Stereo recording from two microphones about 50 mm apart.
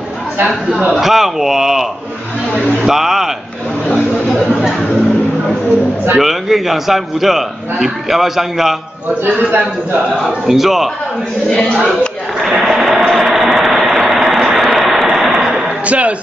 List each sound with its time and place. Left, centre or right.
0.5 s speech: centre
2.9 s speech: centre
6.1 s a man's voice: centre
9.9 s a man's voice: centre
11.4 s speech: centre
12.4 s a sound: centre
13.0 s vehicle: centre
15.8 s speech: right